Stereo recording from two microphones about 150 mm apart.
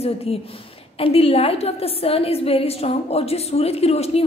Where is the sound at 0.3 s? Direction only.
40° left (ahead or behind).